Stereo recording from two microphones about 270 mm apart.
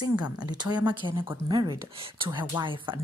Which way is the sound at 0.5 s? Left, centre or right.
Centre.